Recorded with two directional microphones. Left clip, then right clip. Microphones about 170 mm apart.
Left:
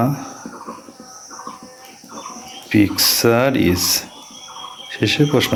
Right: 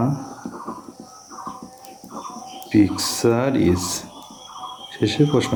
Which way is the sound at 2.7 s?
20° left (ahead or behind).